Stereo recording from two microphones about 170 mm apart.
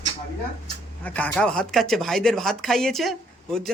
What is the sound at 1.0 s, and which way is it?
Speech, 10° left (ahead or behind).